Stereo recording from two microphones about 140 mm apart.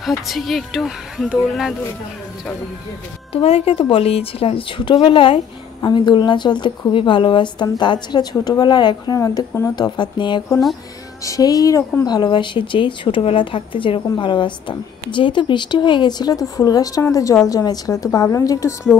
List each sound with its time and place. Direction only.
0.3 s speech: centre (ahead or behind)
3.3 s a woman's voice: 45° left (ahead or behind); by 18.9 s 20° left (ahead or behind)